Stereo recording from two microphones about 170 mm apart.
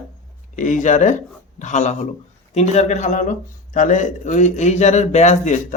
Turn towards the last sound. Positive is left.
turn(degrees=45)  # may be behind; listen again after turning